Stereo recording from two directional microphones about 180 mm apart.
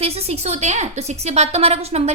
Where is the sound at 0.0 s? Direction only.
35° right (ahead or behind).